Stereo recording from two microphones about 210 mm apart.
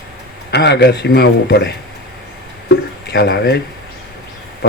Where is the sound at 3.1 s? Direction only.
50° left (ahead or behind).